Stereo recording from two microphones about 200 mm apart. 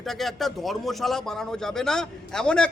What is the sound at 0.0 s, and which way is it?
A man's voice, centre (ahead or behind).